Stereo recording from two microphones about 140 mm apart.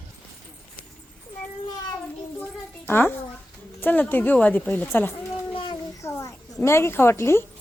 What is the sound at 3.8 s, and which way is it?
A woman's voice, 10° left (ahead or behind).